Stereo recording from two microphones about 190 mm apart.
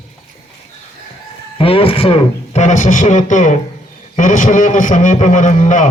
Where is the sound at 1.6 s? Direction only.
30° left (ahead or behind).